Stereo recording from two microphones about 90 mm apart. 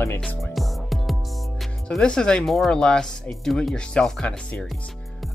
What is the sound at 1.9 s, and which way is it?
Speech, 10° left (ahead or behind).